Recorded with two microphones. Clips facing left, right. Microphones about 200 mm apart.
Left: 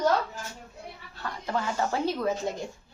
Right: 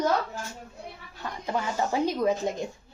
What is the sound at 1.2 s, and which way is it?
A woman's voice, 20° right (ahead or behind).